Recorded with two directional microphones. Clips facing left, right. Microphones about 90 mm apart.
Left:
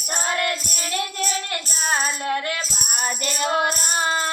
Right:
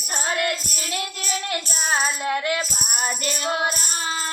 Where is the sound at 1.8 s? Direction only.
15° right (ahead or behind).